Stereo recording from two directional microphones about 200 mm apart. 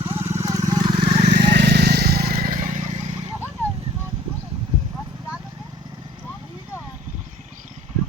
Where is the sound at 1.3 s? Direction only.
55° right (ahead or behind); by 3.2 s 35° right (ahead or behind).